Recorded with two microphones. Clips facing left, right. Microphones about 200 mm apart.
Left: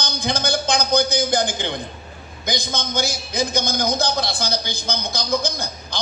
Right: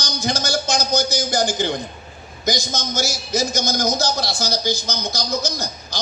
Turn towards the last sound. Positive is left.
turn(degrees=55)  # may be behind; listen again after turning